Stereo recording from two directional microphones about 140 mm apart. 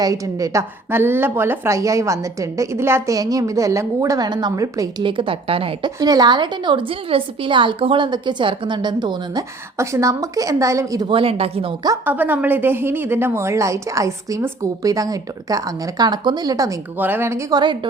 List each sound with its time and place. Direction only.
0.0 s a woman's voice: 25° right (ahead or behind)
5.0 s a woman's voice: 40° right (ahead or behind)
6.0 s a woman's voice: 25° right (ahead or behind)
9.7 s a woman's voice: 20° right (ahead or behind)
11.1 s speech: 40° right (ahead or behind)
12.0 s a woman's voice: 15° right (ahead or behind)
17.0 s speech: 15° right (ahead or behind)